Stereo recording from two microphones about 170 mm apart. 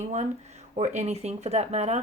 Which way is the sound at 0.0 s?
40° right (ahead or behind).